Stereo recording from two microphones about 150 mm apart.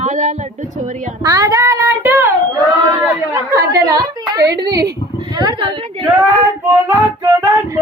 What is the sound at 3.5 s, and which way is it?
A woman's voice, 25° right (ahead or behind).